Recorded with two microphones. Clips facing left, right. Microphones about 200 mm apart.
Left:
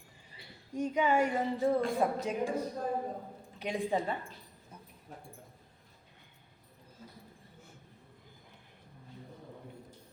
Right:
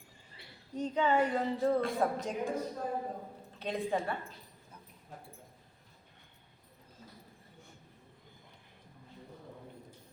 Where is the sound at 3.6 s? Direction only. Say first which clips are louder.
Left 1 dB; 10° left (ahead or behind).